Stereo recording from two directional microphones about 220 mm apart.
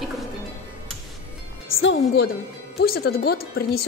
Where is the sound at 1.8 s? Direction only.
55° left (ahead or behind).